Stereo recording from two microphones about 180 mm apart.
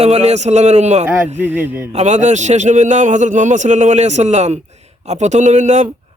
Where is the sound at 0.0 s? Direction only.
35° right (ahead or behind).